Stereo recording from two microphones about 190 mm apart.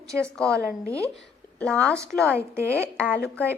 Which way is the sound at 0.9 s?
15° right (ahead or behind).